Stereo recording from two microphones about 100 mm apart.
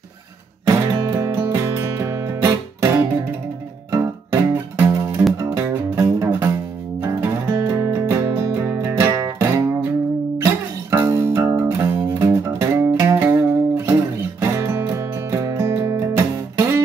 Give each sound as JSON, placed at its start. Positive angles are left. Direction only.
{"t": 0.7, "sound": "music", "side_deg": -30}